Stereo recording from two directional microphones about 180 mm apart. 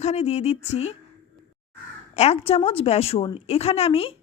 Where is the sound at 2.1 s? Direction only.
35° left (ahead or behind).